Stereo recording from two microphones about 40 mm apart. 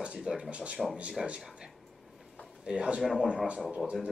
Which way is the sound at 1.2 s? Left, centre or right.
Centre.